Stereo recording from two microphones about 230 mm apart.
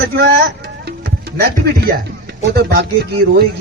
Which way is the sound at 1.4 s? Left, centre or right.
Right.